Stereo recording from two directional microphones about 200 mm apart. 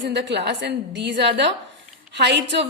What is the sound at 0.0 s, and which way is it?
A woman's voice, 60° right (ahead or behind).